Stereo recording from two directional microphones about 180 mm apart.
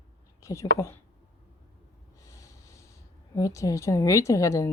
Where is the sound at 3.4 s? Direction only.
20° left (ahead or behind).